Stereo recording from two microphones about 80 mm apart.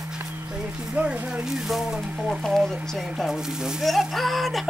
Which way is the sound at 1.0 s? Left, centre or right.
Centre.